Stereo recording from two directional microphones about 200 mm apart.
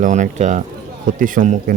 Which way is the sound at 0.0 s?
35° right (ahead or behind).